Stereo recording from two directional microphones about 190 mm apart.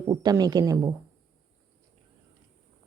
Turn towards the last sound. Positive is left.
turn(degrees=-15)  # may be behind; listen again after turning